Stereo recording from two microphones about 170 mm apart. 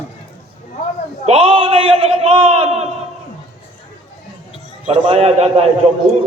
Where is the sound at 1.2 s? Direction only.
35° right (ahead or behind).